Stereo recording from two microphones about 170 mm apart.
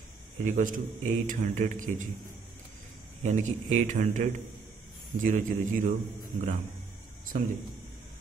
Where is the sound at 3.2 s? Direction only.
45° right (ahead or behind).